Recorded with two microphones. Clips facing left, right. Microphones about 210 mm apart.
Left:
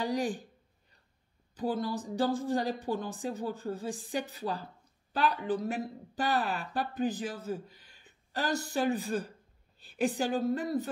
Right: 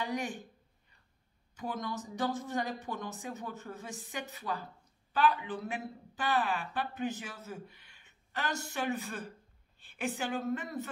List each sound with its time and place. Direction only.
0.0 s speech: 35° left (ahead or behind)
1.5 s speech: 30° left (ahead or behind)